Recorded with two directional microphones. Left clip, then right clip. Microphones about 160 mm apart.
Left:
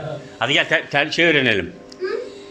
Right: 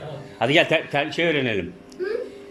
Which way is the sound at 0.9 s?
Centre (ahead or behind).